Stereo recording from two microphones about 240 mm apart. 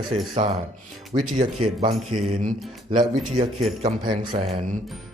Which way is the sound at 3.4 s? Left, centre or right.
Right.